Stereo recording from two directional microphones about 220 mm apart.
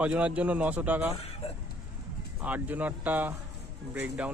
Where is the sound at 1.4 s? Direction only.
25° left (ahead or behind).